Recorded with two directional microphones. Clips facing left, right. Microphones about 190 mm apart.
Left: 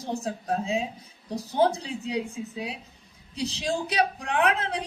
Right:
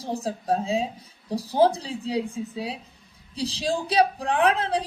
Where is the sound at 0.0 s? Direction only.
35° right (ahead or behind).